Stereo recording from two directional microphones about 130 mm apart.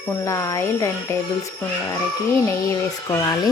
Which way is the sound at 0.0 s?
20° left (ahead or behind).